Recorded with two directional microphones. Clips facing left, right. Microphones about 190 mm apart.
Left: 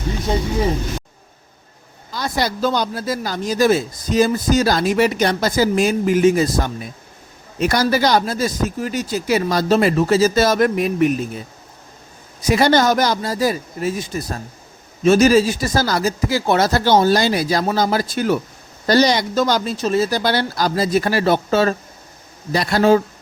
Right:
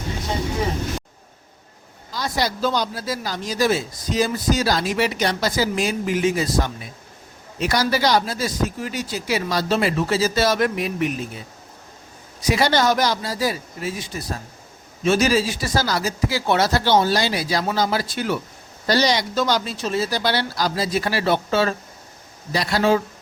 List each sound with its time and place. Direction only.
2.1 s a man's voice: 55° left (ahead or behind)